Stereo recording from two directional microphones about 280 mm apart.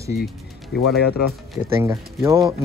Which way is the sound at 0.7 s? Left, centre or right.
Left.